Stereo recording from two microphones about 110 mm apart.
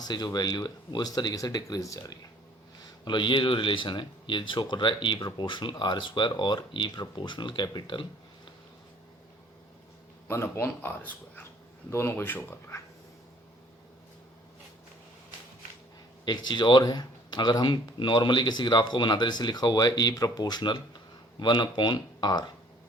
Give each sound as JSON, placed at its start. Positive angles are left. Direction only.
{"t": 0.0, "sound": "speech", "side_deg": 35}
{"t": 3.0, "sound": "speech", "side_deg": 45}
{"t": 10.2, "sound": "speech", "side_deg": 25}
{"t": 16.2, "sound": "speech", "side_deg": 40}